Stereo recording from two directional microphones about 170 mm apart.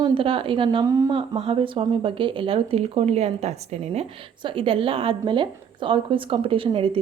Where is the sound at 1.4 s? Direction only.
30° right (ahead or behind).